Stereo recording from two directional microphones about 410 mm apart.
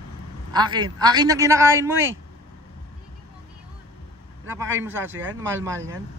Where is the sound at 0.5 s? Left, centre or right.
Centre.